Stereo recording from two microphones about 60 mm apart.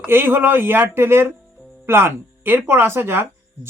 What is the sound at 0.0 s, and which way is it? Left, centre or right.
Speech, right.